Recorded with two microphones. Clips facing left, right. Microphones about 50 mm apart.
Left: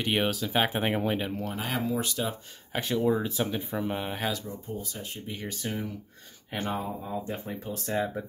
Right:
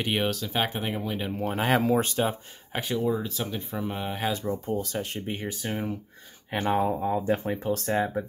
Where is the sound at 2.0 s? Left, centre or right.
Right.